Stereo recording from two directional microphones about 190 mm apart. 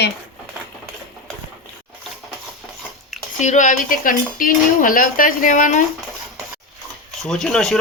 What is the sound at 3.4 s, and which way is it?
Speech, 40° left (ahead or behind).